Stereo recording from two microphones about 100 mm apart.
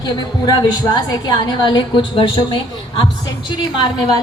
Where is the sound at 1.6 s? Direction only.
50° left (ahead or behind).